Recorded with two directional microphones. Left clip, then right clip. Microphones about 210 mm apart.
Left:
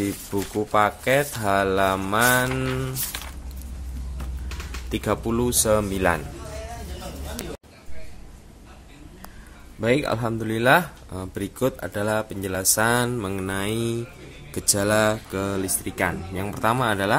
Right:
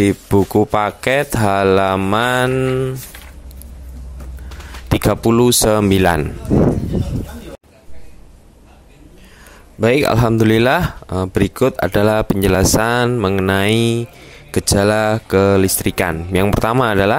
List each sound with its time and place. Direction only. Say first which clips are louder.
0.0 s speech: right 13 dB; 45° right (ahead or behind)
4.9 s speech: right 10 dB; 50° right (ahead or behind)
9.8 s speech: right 9 dB; 45° right (ahead or behind)